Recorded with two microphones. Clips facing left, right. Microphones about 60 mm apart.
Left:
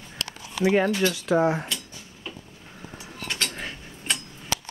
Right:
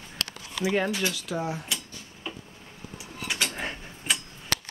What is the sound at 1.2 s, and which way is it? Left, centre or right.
Speech, left.